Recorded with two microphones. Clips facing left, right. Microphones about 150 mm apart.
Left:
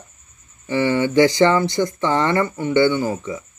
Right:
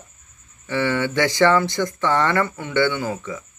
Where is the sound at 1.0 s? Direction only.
20° left (ahead or behind).